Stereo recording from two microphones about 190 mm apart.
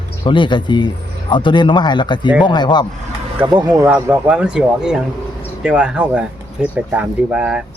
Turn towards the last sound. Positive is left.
turn(degrees=-5)  # may be behind; listen again after turning